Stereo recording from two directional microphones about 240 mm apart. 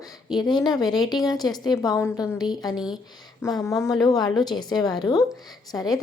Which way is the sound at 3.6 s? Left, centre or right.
Centre.